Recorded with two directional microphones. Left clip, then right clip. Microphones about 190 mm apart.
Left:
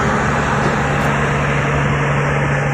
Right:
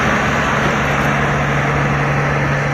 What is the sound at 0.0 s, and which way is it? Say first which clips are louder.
Vehicle: right 1 dB; 40° left (ahead or behind).